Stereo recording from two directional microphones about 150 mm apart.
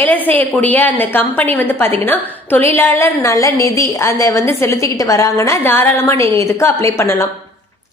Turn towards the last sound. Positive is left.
turn(degrees=20)  # may be behind; listen again after turning